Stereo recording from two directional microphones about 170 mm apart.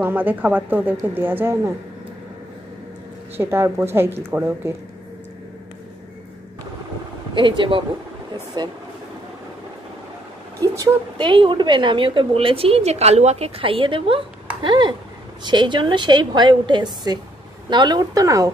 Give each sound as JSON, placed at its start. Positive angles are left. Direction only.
{"t": 0.0, "sound": "a woman's voice", "side_deg": -10}
{"t": 3.3, "sound": "a woman's voice", "side_deg": -15}
{"t": 7.3, "sound": "a woman's voice", "side_deg": -30}
{"t": 10.6, "sound": "a woman's voice", "side_deg": -25}